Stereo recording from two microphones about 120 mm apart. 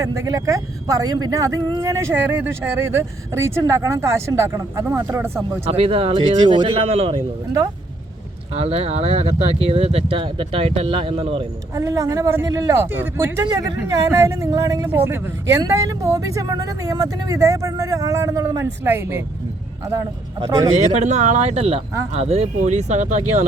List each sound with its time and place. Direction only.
0.0 s a man's voice: 25° right (ahead or behind)
5.6 s speech: 55° right (ahead or behind)
8.5 s speech: 55° right (ahead or behind)
11.7 s a man's voice: 30° right (ahead or behind)
20.8 s speech: 80° right